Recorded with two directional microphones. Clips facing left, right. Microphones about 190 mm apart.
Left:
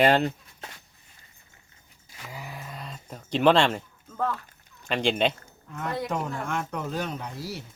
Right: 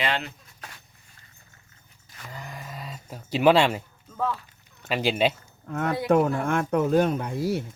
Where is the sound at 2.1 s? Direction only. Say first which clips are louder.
Even; 5° left (ahead or behind).